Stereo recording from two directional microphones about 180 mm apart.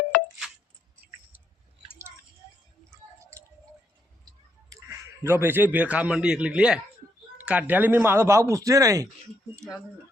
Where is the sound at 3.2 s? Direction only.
15° right (ahead or behind).